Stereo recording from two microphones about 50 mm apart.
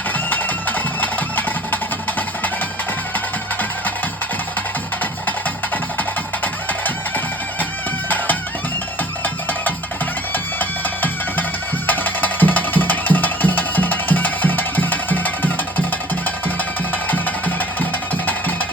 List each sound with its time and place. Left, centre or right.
0.1 s music: left
5.7 s music: left
9.2 s music: left
17.1 s music: left